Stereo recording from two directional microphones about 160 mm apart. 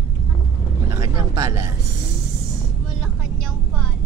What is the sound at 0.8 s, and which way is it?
Speech, 20° right (ahead or behind).